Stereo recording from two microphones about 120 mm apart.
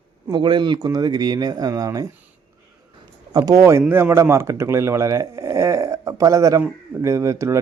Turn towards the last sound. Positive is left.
turn(degrees=-25)  # may be behind; listen again after turning